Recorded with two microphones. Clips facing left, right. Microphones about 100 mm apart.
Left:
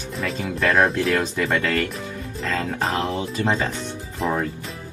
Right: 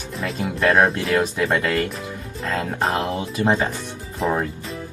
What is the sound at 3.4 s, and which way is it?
Speech, 25° right (ahead or behind).